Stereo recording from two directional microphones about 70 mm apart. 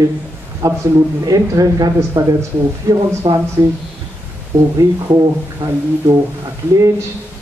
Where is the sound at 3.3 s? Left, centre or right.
Right.